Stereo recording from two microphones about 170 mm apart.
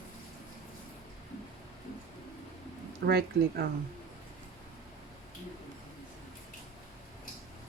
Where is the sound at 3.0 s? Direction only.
70° right (ahead or behind).